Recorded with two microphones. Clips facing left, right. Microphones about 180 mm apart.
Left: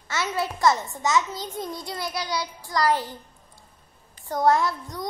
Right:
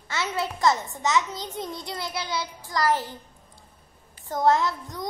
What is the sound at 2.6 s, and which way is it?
Speech, 15° left (ahead or behind).